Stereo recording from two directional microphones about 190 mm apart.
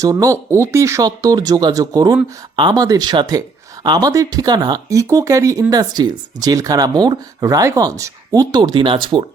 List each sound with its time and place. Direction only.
0.0 s speech: 15° right (ahead or behind)